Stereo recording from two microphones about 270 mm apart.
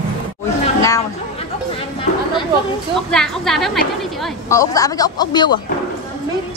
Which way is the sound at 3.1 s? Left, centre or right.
Centre.